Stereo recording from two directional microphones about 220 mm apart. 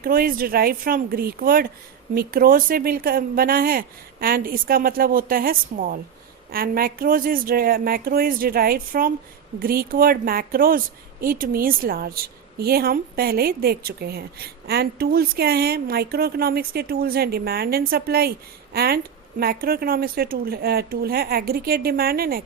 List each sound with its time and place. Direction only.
0.0 s a woman's voice: 40° right (ahead or behind)